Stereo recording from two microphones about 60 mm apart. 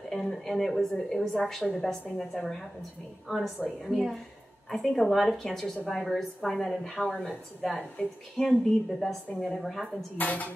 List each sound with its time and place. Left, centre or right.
0.1 s a sound: centre
1.1 s a woman's voice: centre
10.1 s cutlery: left